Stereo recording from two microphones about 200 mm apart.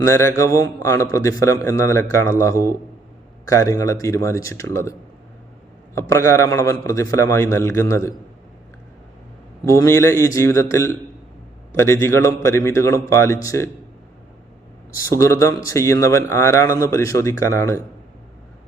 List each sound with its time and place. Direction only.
0.0 s a man's voice: 15° left (ahead or behind)
9.6 s a man's voice: 15° left (ahead or behind)
15.1 s a man's voice: 15° left (ahead or behind)